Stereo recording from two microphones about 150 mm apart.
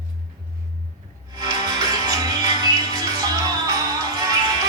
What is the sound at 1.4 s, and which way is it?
Music, 25° right (ahead or behind).